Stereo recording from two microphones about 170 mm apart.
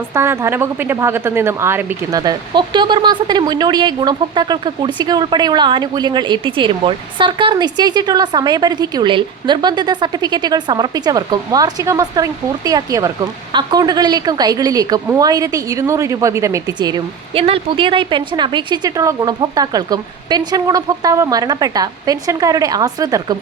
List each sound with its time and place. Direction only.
0.1 s speech: 15° right (ahead or behind)